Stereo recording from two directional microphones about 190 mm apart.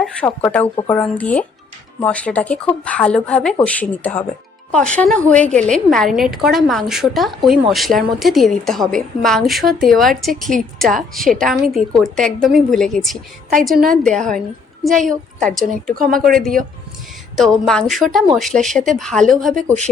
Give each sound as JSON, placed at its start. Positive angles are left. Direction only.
{"t": 0.3, "sound": "a woman's voice", "side_deg": 10}
{"t": 16.0, "sound": "speech", "side_deg": -50}
{"t": 16.3, "sound": "a woman's voice", "side_deg": 0}